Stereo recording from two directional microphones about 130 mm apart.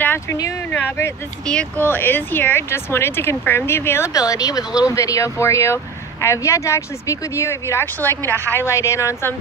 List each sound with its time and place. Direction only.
0.0 s a sound: 15° left (ahead or behind)
0.7 s speech: 15° left (ahead or behind)
1.4 s speech: 5° left (ahead or behind)